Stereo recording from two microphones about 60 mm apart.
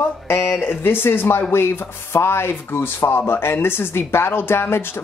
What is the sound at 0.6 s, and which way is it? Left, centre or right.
Speech, left.